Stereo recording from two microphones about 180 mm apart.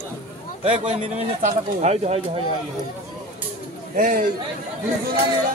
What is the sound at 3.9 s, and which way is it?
Speech, 50° right (ahead or behind).